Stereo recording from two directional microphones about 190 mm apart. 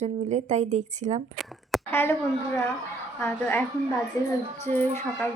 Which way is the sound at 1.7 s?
Centre (ahead or behind).